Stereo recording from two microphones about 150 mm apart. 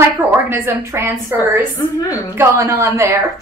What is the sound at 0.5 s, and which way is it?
A woman's voice, 15° right (ahead or behind).